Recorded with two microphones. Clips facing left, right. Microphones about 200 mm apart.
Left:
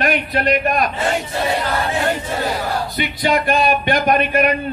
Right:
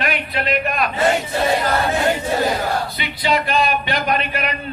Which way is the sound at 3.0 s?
50° left (ahead or behind).